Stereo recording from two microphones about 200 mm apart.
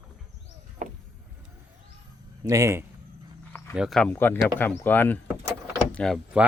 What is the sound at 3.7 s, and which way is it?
Speech, centre (ahead or behind).